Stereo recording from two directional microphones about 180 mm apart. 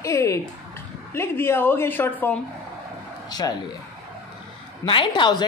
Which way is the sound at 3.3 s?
20° left (ahead or behind).